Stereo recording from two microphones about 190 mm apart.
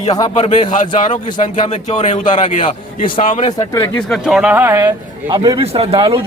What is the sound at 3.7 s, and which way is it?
Speech, 10° left (ahead or behind).